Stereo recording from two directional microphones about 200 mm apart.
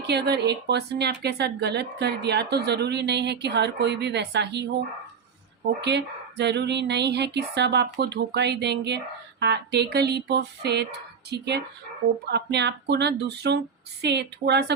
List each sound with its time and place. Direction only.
0.0 s speech: 55° right (ahead or behind)
5.8 s speech: 60° right (ahead or behind)